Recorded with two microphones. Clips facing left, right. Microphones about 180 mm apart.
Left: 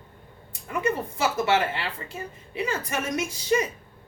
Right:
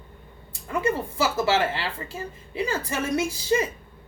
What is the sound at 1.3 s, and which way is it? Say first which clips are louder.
A man's voice: even; 30° right (ahead or behind).